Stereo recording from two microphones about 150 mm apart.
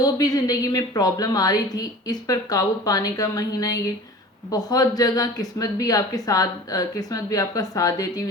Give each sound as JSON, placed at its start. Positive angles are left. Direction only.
{"t": 0.0, "sound": "a woman's voice", "side_deg": 25}